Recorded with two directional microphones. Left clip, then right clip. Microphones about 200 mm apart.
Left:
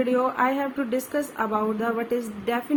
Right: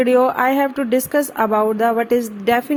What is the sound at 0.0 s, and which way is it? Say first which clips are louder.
A woman's voice: right 8 dB; 45° right (ahead or behind).